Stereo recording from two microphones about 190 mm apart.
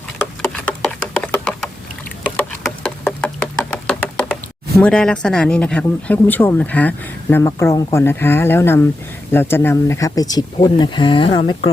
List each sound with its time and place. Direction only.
0.4 s a sound: 5° left (ahead or behind)
2.3 s knock: 10° left (ahead or behind)
4.8 s speech: 5° left (ahead or behind); by 11.7 s 30° left (ahead or behind)